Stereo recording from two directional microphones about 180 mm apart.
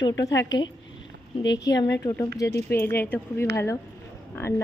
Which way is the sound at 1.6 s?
20° left (ahead or behind).